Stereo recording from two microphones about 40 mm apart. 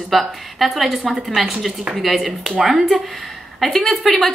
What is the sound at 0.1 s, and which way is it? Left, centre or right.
Speech, centre.